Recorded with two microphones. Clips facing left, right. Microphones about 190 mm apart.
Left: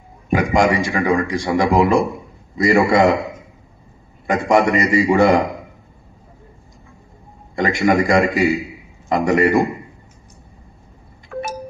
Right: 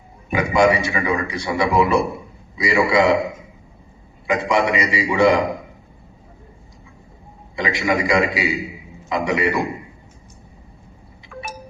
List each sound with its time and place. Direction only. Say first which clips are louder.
0.3 s a man's voice: left 1 dB; 50° left (ahead or behind)
4.3 s a man's voice: left 3 dB; 45° left (ahead or behind)
7.5 s a man's voice: left 5 dB; 45° left (ahead or behind)
11.3 s wind chime: left 7 dB; 45° left (ahead or behind)